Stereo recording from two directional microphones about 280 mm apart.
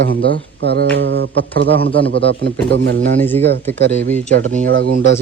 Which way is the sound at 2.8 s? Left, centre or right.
Right.